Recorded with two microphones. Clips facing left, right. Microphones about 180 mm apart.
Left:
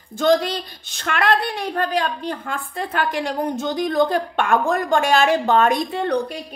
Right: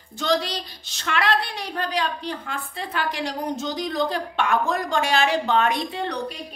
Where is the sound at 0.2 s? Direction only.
50° left (ahead or behind).